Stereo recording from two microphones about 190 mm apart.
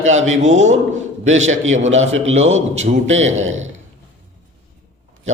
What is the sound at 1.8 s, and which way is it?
A man's voice, 35° right (ahead or behind).